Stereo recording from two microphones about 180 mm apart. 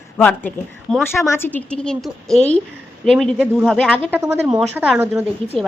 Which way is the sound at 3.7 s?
10° left (ahead or behind).